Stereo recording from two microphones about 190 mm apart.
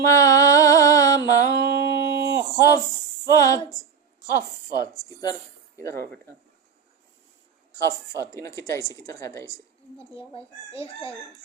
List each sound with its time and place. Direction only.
0.0 s music: 15° left (ahead or behind)
2.6 s a woman's voice: 20° left (ahead or behind)
7.7 s a woman's voice: 15° left (ahead or behind)
10.0 s speech: 30° left (ahead or behind)